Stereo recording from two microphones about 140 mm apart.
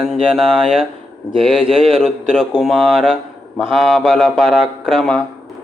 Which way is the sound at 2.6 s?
Centre (ahead or behind).